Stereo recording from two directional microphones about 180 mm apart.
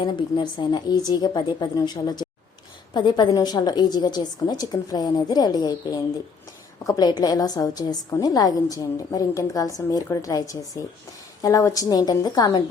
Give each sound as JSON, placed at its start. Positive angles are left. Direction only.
{"t": 0.0, "sound": "a woman's voice", "side_deg": 25}